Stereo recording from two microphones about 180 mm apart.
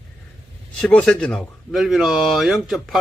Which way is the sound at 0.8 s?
5° left (ahead or behind).